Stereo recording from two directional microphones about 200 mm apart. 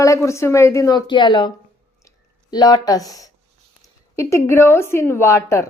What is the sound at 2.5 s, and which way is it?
A woman's voice, 20° left (ahead or behind).